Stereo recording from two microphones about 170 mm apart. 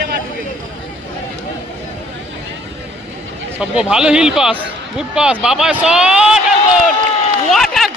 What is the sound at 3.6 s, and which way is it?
Speech, 5° right (ahead or behind).